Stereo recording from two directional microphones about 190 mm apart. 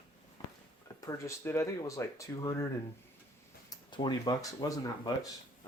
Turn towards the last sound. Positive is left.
turn(degrees=20)  # may be behind; listen again after turning